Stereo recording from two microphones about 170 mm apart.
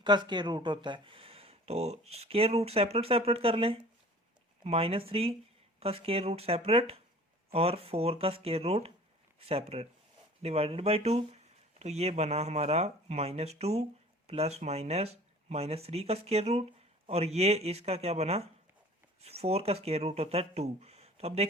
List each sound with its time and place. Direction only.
0.0 s speech: 25° right (ahead or behind)